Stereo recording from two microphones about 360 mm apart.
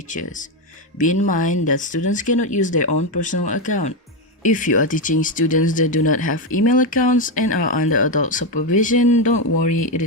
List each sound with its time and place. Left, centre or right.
0.1 s speech: left
2.8 s speech: left
3.4 s speech: left